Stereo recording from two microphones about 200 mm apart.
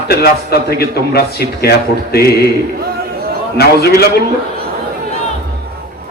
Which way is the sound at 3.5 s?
50° left (ahead or behind).